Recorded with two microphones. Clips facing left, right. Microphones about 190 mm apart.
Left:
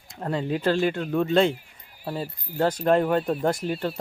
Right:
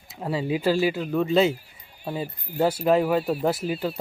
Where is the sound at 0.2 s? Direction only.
5° right (ahead or behind).